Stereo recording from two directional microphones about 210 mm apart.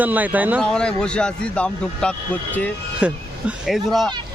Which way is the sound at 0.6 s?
5° left (ahead or behind).